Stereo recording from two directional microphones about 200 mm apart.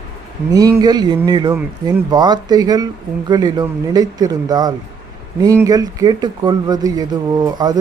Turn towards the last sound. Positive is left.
turn(degrees=-20)  # may be behind; listen again after turning